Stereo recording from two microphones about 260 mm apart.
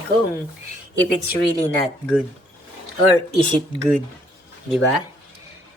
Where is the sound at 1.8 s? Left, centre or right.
Centre.